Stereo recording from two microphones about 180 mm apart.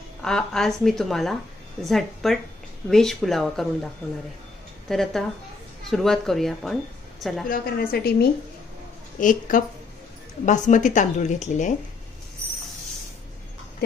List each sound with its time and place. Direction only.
0.2 s a woman's voice: 5° left (ahead or behind)
7.4 s a woman's voice: 50° left (ahead or behind)
9.2 s a woman's voice: 45° left (ahead or behind)